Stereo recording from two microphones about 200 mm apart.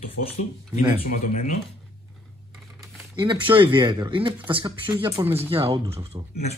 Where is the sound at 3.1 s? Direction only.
25° right (ahead or behind).